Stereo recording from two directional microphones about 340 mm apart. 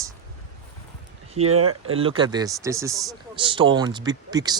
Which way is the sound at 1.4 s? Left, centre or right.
Right.